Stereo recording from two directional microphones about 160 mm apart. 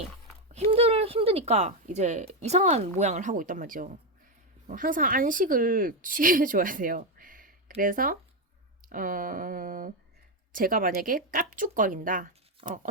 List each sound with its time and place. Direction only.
0.5 s speech: 40° right (ahead or behind); by 12.3 s 55° right (ahead or behind)
12.6 s speech: 35° right (ahead or behind)